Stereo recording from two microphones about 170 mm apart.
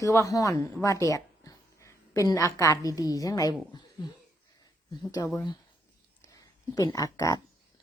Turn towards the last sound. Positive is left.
turn(degrees=20)  # may be behind; listen again after turning